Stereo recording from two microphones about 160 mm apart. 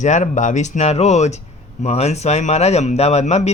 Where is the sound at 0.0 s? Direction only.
50° left (ahead or behind).